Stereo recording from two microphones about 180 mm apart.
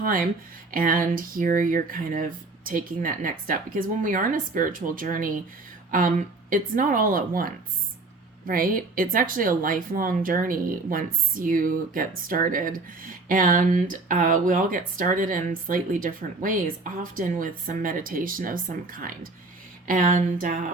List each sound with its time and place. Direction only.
0.0 s speech: 50° right (ahead or behind)